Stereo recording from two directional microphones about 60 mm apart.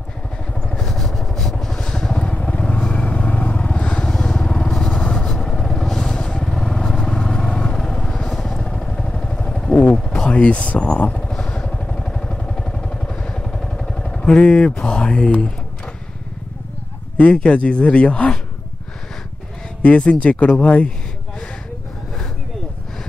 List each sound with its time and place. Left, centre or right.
0.7 s vehicle: centre
17.2 s speech: centre
19.8 s speech: centre